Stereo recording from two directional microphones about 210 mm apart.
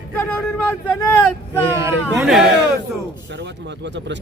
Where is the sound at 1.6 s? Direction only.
15° right (ahead or behind).